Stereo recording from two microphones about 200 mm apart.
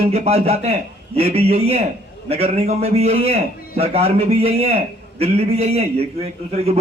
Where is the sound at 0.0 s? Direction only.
30° right (ahead or behind).